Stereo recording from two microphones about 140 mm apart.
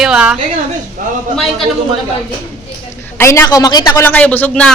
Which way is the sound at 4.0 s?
15° left (ahead or behind).